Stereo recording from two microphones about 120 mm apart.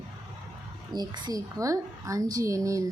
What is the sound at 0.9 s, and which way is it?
A woman's voice, 35° right (ahead or behind).